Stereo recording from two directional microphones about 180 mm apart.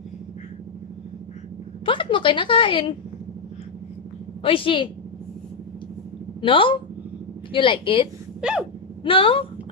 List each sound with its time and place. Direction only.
1.9 s a woman's voice: 30° left (ahead or behind)
4.4 s a woman's voice: 30° left (ahead or behind)
6.4 s a woman's voice: 30° left (ahead or behind)
8.4 s a sound: 5° right (ahead or behind)
9.0 s a woman's voice: 30° left (ahead or behind)